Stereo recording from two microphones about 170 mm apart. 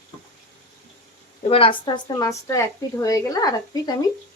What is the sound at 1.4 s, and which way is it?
A woman's voice, 30° left (ahead or behind).